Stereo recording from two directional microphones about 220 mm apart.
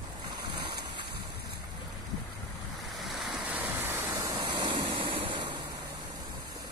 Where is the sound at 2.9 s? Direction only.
Centre (ahead or behind); by 5.6 s 20° right (ahead or behind).